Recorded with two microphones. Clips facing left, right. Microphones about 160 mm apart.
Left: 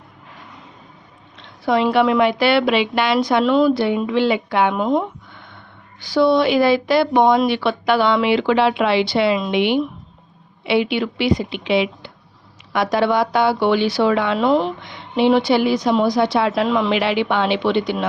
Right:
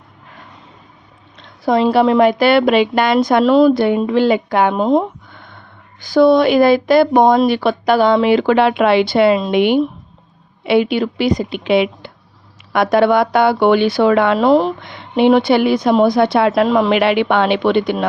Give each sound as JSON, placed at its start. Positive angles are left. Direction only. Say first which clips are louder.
{"t": 1.4, "sound": "a woman's voice", "louder": "right 3 dB", "side_deg": -35}
{"t": 4.7, "sound": "speech", "louder": "right 4 dB", "side_deg": -30}
{"t": 5.3, "sound": "a sound", "louder": "right 2 dB", "side_deg": -50}
{"t": 6.0, "sound": "a woman's voice", "louder": "right 5 dB", "side_deg": -50}
{"t": 14.3, "sound": "speech", "louder": "right 5 dB", "side_deg": -40}
{"t": 14.8, "sound": "a woman's voice", "louder": "right 4 dB", "side_deg": -55}
{"t": 16.6, "sound": "a woman's voice", "louder": "right 5 dB", "side_deg": -45}